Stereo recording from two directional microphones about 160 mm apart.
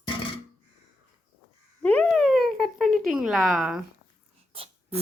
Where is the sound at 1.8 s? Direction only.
5° left (ahead or behind).